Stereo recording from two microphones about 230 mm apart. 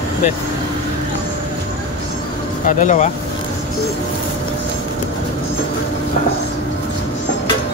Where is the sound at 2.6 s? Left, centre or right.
Left.